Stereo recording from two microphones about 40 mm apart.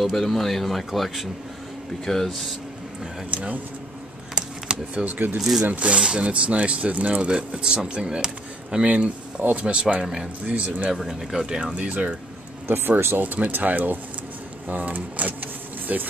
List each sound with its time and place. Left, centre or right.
0.0 s speech: centre
3.3 s speech: right
4.9 s speech: right
5.4 s speech: centre
5.7 s speech: right
8.8 s speech: right
9.7 s speech: right
11.0 s speech: centre
11.4 s speech: centre
11.7 s speech: right
12.6 s speech: right
13.2 s speech: right